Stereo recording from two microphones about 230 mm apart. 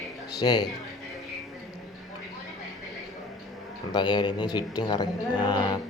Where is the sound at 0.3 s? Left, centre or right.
Centre.